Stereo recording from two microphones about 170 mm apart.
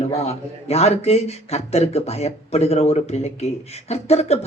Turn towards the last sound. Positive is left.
turn(degrees=35)  # may be behind; listen again after turning